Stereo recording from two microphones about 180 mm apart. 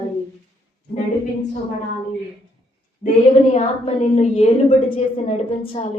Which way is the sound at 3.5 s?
40° left (ahead or behind).